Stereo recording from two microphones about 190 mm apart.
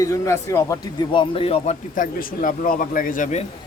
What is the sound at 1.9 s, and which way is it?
A man's voice, 45° left (ahead or behind).